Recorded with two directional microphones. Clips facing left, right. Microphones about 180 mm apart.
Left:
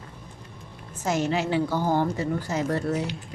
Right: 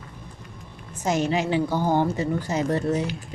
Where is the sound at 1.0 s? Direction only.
20° right (ahead or behind).